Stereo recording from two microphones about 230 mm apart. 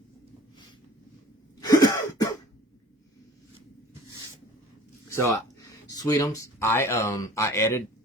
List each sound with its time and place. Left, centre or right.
1.6 s cough: centre
5.0 s a sound: centre
5.9 s speech: centre